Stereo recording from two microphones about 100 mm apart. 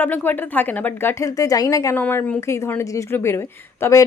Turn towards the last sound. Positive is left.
turn(degrees=30)  # may be behind; listen again after turning